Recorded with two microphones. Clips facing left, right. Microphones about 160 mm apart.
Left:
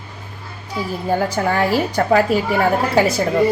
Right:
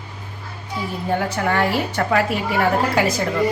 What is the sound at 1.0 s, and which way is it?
A woman's voice, 30° left (ahead or behind).